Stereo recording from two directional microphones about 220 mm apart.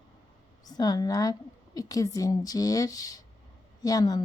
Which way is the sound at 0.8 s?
15° left (ahead or behind).